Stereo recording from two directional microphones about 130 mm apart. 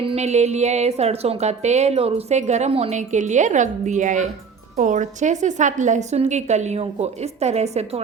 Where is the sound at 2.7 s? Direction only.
50° right (ahead or behind).